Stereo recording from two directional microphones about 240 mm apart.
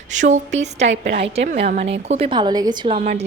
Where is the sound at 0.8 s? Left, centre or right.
Right.